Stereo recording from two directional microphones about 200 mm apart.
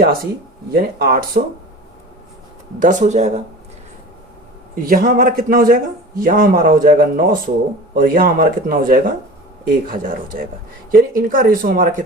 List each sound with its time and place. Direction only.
0.7 s a man's voice: 50° right (ahead or behind)
2.7 s speech: 40° right (ahead or behind)
4.7 s a man's voice: 45° right (ahead or behind)